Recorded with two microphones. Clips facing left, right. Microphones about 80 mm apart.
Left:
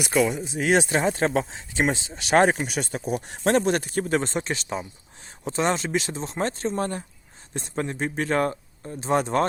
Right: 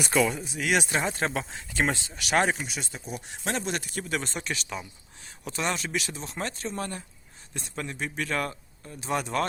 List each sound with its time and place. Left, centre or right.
0.0 s speech: centre; by 2.6 s left
2.6 s speech: left
3.1 s speech: left
3.4 s speech: left